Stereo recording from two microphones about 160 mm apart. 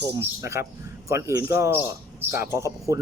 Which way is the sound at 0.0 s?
15° right (ahead or behind).